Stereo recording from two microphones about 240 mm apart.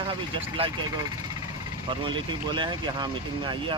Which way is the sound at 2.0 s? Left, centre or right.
Centre.